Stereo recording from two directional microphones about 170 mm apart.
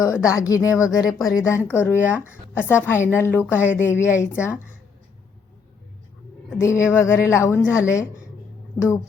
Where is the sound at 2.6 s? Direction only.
15° left (ahead or behind).